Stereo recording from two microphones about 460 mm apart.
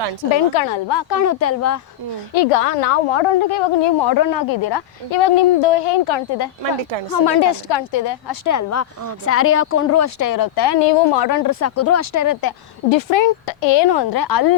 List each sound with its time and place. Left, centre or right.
0.3 s a woman's voice: left
1.1 s speech: left
2.3 s a woman's voice: left
5.1 s speech: left
7.1 s a woman's voice: left
8.4 s speech: left
11.4 s speech: left
12.9 s a woman's voice: left